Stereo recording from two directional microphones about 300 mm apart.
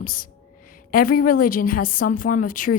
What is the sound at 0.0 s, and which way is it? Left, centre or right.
A woman's voice, left.